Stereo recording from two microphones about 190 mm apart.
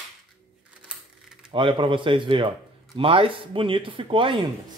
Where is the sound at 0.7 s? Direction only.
5° right (ahead or behind).